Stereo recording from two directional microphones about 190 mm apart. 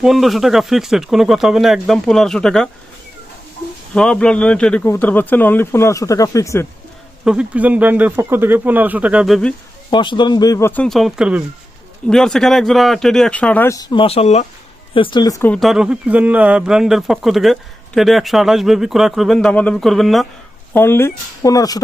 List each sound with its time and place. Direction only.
0.0 s speech: centre (ahead or behind)
3.9 s a man's voice: 5° left (ahead or behind)
7.3 s speech: 5° right (ahead or behind)
9.9 s a man's voice: 25° left (ahead or behind); by 20.2 s centre (ahead or behind)
20.7 s a man's voice: 10° left (ahead or behind)